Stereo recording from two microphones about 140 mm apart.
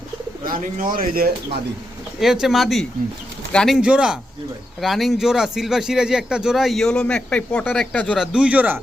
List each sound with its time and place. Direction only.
0.4 s speech: 80° right
2.2 s a man's voice: 5° right (ahead or behind)
3.8 s a man's voice: 5° right (ahead or behind)
8.2 s speech: 5° right (ahead or behind)